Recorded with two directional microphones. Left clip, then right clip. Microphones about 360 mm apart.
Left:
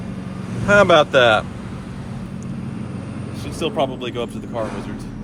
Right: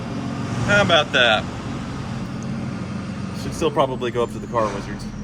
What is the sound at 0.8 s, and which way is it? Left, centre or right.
Speech, centre.